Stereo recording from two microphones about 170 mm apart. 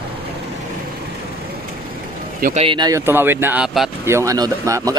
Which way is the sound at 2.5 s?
30° right (ahead or behind).